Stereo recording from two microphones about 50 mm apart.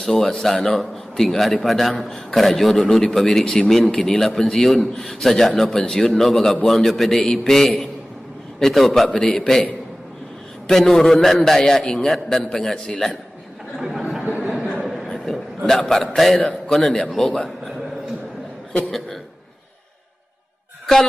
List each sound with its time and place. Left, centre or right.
0.0 s a man's voice: centre
9.1 s a man's voice: centre
10.7 s a man's voice: centre
13.7 s chatter: centre
14.2 s a sound: right
14.9 s a sound: centre
16.2 s a man's voice: centre
18.7 s speech: centre